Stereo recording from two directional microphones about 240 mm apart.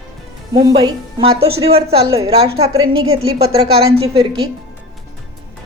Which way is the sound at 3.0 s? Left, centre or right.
Right.